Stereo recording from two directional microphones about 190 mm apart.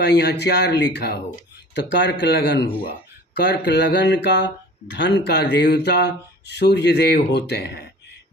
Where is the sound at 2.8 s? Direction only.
65° left (ahead or behind).